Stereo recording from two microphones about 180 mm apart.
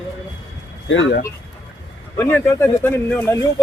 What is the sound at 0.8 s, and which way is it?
Speech, 90° left.